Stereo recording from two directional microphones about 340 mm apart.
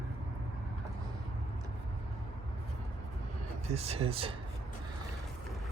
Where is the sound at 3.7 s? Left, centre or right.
Centre.